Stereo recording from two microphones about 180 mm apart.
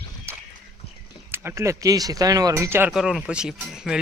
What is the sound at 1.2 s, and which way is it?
Speech, 15° right (ahead or behind).